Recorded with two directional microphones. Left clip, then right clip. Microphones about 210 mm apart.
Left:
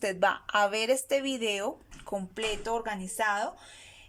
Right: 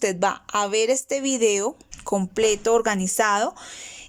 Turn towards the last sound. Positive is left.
turn(degrees=-35)  # may be behind; listen again after turning